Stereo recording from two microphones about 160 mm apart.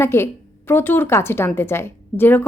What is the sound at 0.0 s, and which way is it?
A woman's voice, 15° left (ahead or behind).